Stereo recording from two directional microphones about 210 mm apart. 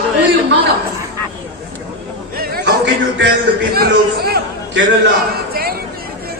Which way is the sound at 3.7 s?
45° right (ahead or behind).